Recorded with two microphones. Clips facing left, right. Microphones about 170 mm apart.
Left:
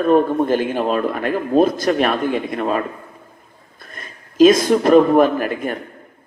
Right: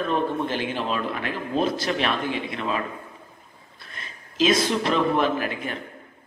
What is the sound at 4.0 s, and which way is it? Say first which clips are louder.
A man's voice: left 12 dB; 50° left (ahead or behind).